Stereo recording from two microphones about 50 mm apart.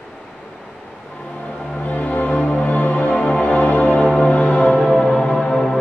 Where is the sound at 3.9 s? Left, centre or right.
Centre.